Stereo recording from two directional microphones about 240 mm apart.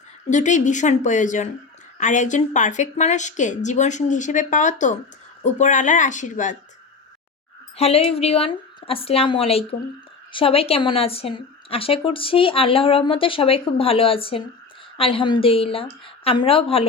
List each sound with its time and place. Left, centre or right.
0.3 s a woman's voice: left
7.8 s a woman's voice: left